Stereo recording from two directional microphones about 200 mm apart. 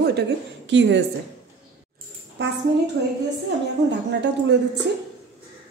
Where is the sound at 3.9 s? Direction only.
60° right (ahead or behind).